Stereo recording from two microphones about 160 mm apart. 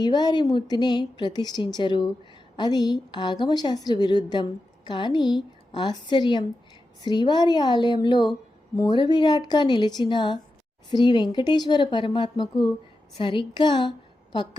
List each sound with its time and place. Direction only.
0.0 s a woman's voice: 25° left (ahead or behind)